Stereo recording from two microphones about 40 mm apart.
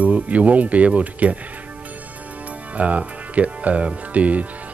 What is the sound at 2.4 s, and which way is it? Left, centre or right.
Music, right.